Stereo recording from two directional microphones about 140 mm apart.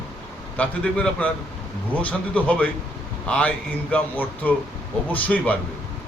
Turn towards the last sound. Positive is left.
turn(degrees=10)  # may be behind; listen again after turning